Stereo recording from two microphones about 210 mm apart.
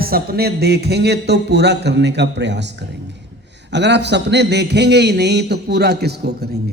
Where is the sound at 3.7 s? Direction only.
55° right (ahead or behind).